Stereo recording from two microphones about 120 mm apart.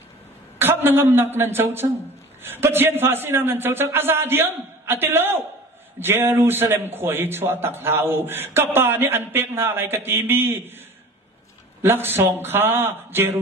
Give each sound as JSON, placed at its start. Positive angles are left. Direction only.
{"t": 0.6, "sound": "a man's voice", "side_deg": -15}
{"t": 11.8, "sound": "a man's voice", "side_deg": -20}